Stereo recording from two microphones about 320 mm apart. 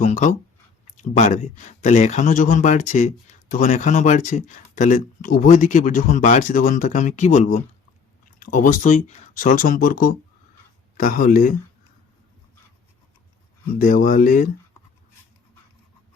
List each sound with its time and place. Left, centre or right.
0.0 s speech: left
13.7 s speech: left